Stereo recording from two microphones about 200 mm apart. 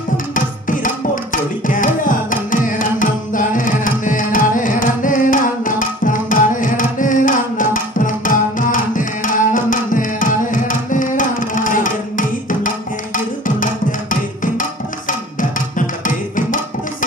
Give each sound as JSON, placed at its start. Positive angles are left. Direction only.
{"t": 0.7, "sound": "music", "side_deg": 40}
{"t": 14.4, "sound": "music", "side_deg": 40}